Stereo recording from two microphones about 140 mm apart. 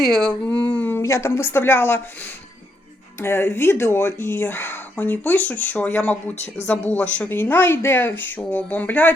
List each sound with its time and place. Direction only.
0.0 s speech: 5° left (ahead or behind)
3.2 s speech: 15° left (ahead or behind)
6.3 s speech: 55° left (ahead or behind)
6.7 s speech: 10° left (ahead or behind)